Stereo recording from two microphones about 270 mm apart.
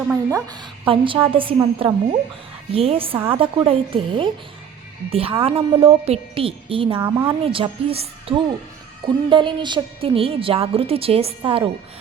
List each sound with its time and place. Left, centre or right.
0.1 s a woman's voice: centre